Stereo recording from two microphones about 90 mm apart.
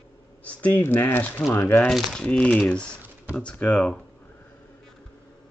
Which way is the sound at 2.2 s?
15° left (ahead or behind).